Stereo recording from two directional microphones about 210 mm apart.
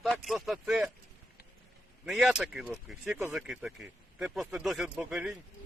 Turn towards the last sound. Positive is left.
turn(degrees=-5)  # may be behind; listen again after turning